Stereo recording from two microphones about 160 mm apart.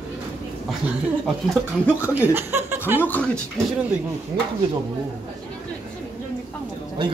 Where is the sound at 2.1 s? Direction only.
10° right (ahead or behind).